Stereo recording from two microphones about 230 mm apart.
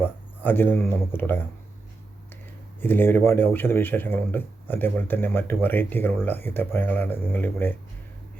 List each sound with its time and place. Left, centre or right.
0.0 s speech: centre
2.8 s speech: centre